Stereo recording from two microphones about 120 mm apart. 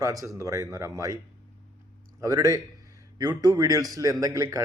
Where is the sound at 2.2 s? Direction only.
25° right (ahead or behind).